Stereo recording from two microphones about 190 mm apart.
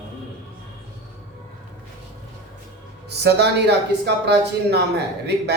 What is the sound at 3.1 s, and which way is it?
Speech, 60° right (ahead or behind).